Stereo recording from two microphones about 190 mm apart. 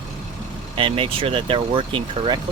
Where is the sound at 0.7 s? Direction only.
30° right (ahead or behind).